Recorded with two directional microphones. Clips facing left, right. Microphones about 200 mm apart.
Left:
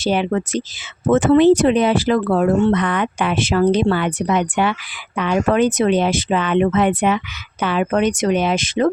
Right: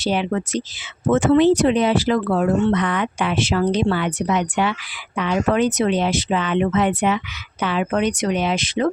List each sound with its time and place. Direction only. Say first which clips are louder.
0.0 s speech: left 3 dB; 50° left (ahead or behind)